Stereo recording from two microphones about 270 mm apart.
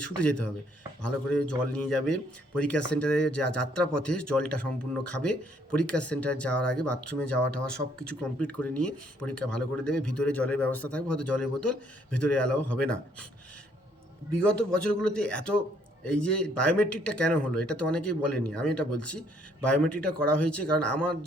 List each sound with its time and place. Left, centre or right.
0.0 s speech: centre
14.3 s speech: centre